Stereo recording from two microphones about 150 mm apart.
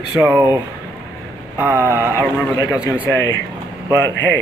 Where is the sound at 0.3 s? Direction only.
20° right (ahead or behind).